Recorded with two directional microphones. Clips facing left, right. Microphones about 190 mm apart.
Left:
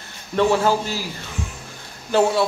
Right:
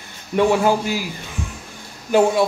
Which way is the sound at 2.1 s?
15° right (ahead or behind).